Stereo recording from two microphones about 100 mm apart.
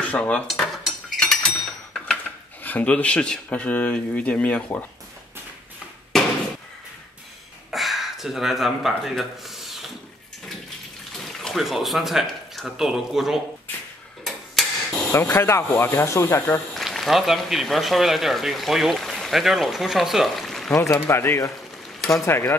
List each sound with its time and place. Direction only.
0.0 s cutlery: 15° left (ahead or behind)
0.5 s cutlery: centre (ahead or behind)
2.6 s speech: 15° left (ahead or behind)
6.1 s a sound: 5° left (ahead or behind)
7.7 s a sound: centre (ahead or behind)
11.1 s speech: 5° left (ahead or behind)
14.2 s tick-tock: 5° left (ahead or behind)
15.1 s speech: 25° left (ahead or behind)
16.7 s a man's voice: centre (ahead or behind)
20.7 s speech: 30° left (ahead or behind)